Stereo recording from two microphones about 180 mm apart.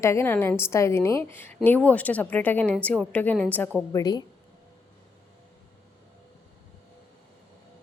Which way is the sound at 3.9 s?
20° left (ahead or behind).